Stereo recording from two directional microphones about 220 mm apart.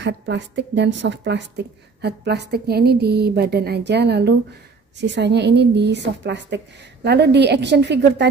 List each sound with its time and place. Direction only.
0.0 s a woman's voice: 55° right (ahead or behind)